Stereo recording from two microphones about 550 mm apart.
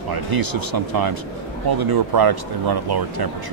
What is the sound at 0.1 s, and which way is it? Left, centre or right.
Speech, right.